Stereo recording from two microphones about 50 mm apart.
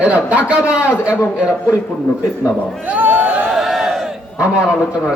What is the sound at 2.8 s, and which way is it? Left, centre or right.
Speech, right.